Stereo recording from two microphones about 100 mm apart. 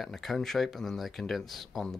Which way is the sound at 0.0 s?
Centre (ahead or behind).